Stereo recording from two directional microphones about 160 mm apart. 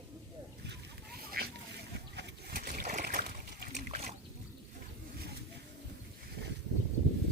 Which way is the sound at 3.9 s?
40° right (ahead or behind).